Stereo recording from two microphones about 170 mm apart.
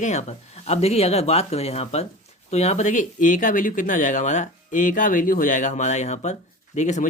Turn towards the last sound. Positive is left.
turn(degrees=45)  # may be behind; listen again after turning